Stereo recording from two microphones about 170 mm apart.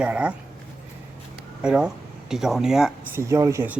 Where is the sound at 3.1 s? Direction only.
15° right (ahead or behind).